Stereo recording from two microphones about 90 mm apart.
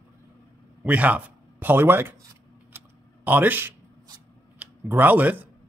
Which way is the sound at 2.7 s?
20° right (ahead or behind).